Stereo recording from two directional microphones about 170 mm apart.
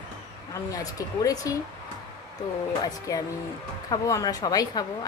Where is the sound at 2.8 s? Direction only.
20° left (ahead or behind).